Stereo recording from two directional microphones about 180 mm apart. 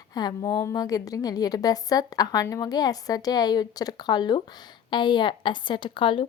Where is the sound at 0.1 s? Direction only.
20° left (ahead or behind).